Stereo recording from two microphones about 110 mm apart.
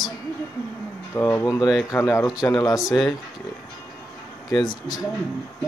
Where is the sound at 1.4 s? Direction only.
35° left (ahead or behind).